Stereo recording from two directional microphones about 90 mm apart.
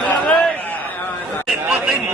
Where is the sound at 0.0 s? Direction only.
15° left (ahead or behind).